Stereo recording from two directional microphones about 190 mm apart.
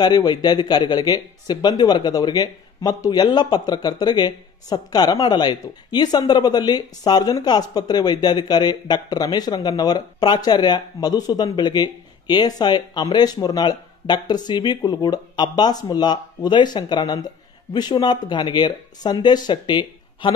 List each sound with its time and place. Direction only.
0.0 s speech: 20° left (ahead or behind)